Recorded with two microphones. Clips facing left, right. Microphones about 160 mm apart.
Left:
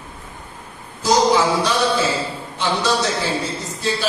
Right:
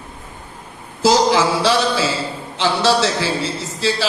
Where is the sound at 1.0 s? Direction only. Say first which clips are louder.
Right 1 dB; 90° right.